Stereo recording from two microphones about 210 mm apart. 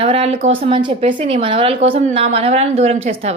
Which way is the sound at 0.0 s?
30° right (ahead or behind).